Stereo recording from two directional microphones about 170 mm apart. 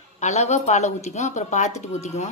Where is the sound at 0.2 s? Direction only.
40° left (ahead or behind).